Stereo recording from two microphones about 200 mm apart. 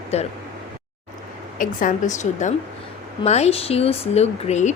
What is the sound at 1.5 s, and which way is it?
A woman's voice, 40° left (ahead or behind).